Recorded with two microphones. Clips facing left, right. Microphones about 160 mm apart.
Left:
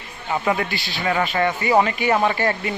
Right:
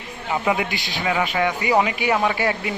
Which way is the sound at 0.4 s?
15° right (ahead or behind).